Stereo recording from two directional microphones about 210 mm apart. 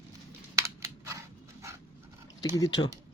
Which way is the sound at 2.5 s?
20° left (ahead or behind).